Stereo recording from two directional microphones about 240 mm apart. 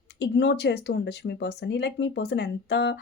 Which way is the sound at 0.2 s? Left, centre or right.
Left.